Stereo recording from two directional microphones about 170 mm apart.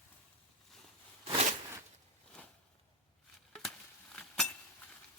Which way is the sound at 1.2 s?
40° right (ahead or behind).